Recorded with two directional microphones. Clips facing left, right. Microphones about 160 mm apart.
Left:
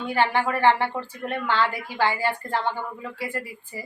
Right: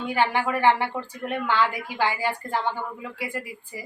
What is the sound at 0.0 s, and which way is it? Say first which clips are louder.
A woman's voice: left 1 dB; 10° right (ahead or behind).